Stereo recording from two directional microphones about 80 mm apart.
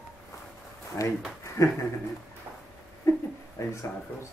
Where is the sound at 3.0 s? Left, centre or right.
Left.